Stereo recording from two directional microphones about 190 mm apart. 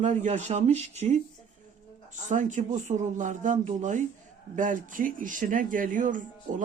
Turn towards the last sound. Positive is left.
turn(degrees=-45)  # may be behind; listen again after turning